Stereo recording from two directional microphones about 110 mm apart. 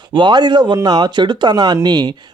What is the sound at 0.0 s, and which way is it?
Speech, 45° right (ahead or behind).